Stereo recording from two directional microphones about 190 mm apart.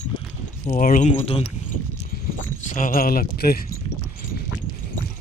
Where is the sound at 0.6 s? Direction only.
45° left (ahead or behind).